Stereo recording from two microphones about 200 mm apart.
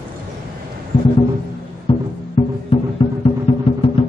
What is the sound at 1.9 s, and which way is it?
Music, 30° left (ahead or behind).